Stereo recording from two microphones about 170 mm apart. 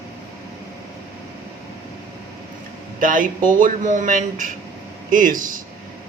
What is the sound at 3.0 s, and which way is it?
Speech, 55° right (ahead or behind).